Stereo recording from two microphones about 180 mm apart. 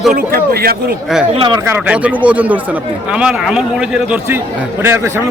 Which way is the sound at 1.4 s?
25° right (ahead or behind).